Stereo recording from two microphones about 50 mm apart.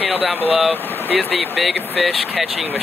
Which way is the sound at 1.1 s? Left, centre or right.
Centre.